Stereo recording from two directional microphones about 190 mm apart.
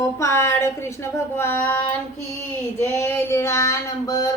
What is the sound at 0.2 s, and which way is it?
Speech, 15° left (ahead or behind).